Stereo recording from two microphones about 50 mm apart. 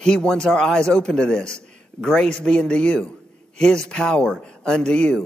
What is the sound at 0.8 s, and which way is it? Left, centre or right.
A man's voice, centre.